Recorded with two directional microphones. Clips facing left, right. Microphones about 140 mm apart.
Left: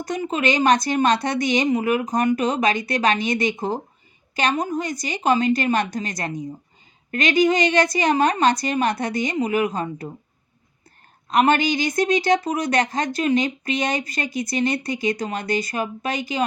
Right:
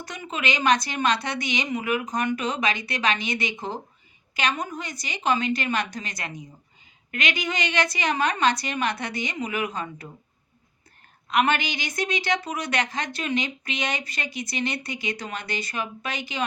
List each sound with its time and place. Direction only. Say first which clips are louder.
0.0 s a woman's voice: left 8 dB; 40° left (ahead or behind)
11.3 s a woman's voice: left 5 dB; 40° left (ahead or behind)